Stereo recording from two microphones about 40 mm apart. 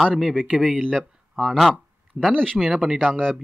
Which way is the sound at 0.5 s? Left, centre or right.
Right.